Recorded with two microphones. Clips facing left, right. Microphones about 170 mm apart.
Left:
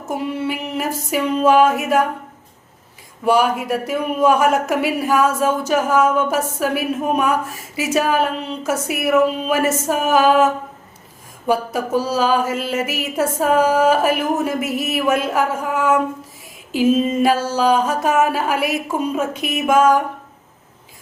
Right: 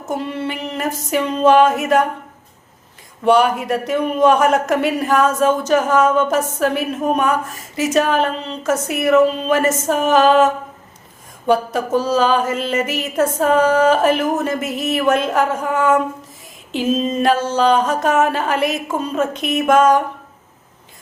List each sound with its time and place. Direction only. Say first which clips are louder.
0.0 s mantra: even; 10° left (ahead or behind)
3.2 s mantra: right 2 dB; 5° left (ahead or behind)